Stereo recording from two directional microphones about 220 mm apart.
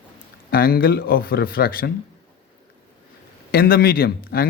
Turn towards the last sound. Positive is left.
turn(degrees=45)  # may be behind; listen again after turning